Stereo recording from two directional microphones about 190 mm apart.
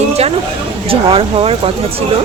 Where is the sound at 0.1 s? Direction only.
35° right (ahead or behind).